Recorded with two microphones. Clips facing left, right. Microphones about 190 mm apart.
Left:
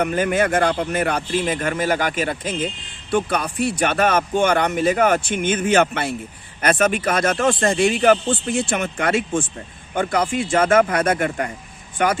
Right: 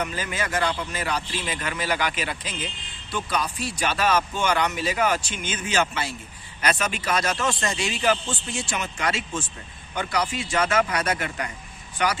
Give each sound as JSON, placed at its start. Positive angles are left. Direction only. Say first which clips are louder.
{"t": 0.0, "sound": "speech", "louder": "left 10 dB", "side_deg": 55}